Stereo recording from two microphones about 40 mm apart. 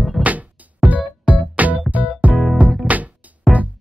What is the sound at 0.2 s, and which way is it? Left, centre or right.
Music, right.